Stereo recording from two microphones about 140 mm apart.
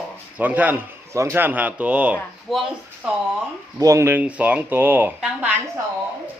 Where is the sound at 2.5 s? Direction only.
Centre (ahead or behind).